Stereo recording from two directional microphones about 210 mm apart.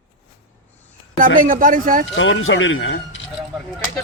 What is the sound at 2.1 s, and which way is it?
Speech, 65° left (ahead or behind).